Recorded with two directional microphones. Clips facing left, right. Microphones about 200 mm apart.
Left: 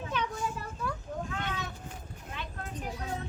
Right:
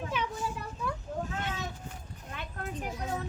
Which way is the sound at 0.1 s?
5° right (ahead or behind).